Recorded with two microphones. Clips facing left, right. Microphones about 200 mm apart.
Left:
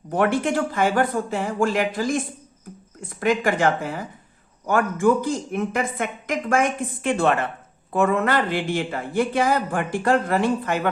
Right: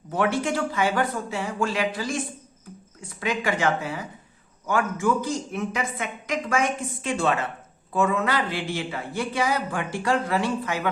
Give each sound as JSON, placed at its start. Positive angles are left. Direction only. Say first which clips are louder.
{"t": 0.4, "sound": "speech", "louder": "left 3 dB", "side_deg": 50}